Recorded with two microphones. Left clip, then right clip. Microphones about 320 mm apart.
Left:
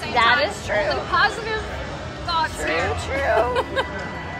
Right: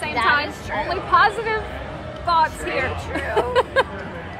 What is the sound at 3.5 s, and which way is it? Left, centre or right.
Speech, right.